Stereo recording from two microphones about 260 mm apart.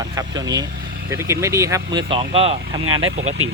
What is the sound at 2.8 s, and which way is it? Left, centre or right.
Speech, right.